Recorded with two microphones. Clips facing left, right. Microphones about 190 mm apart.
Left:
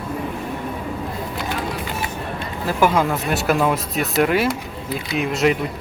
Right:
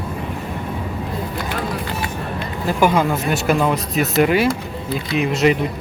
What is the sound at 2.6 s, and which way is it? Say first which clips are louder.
Speech: right 1 dB; centre (ahead or behind).